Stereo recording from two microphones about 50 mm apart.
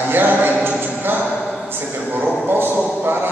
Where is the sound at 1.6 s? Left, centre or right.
Right.